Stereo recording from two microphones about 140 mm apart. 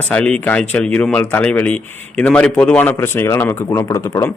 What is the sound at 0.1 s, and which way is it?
Speech, 10° left (ahead or behind).